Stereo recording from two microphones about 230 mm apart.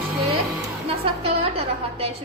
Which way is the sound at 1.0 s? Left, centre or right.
Right.